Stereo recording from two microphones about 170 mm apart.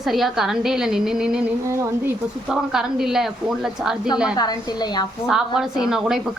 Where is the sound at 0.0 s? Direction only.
Centre (ahead or behind).